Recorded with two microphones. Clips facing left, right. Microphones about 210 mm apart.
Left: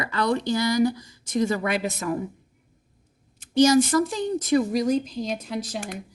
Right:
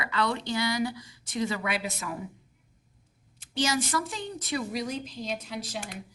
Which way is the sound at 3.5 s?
40° left (ahead or behind).